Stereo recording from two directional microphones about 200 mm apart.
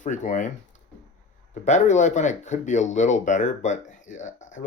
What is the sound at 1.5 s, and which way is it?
Speech, 35° left (ahead or behind).